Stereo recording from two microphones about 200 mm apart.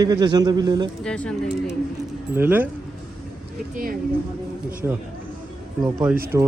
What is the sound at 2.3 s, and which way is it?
Speech, 10° right (ahead or behind).